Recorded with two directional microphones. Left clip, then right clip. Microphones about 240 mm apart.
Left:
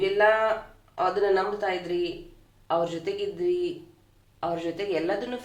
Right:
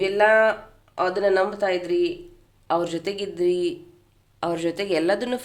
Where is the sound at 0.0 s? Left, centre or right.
Right.